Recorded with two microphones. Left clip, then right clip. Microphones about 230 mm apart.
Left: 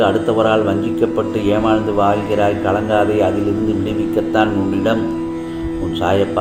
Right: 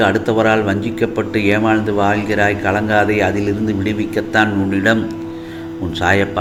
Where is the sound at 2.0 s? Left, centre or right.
Right.